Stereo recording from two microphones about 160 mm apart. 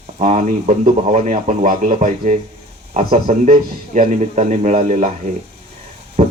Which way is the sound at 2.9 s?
40° right (ahead or behind).